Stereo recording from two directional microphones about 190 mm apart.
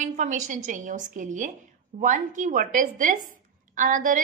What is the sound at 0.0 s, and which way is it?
A woman's voice, 40° right (ahead or behind).